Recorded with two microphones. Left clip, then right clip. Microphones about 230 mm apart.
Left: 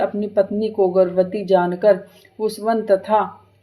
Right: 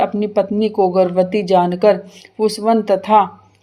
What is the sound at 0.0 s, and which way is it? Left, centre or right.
Speech, right.